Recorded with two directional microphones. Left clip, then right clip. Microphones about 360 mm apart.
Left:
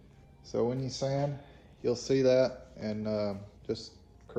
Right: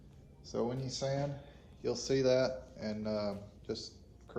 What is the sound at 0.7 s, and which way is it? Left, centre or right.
Speech, centre.